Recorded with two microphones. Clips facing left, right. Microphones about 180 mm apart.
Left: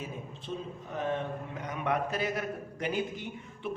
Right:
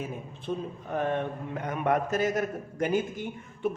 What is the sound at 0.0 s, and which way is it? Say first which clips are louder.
A man's voice: right 4 dB; 55° right (ahead or behind).